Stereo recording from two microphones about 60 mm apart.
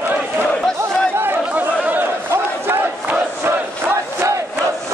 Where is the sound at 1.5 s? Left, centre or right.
Right.